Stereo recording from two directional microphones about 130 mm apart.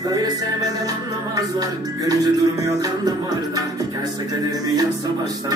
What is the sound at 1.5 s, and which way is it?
Music, 30° right (ahead or behind).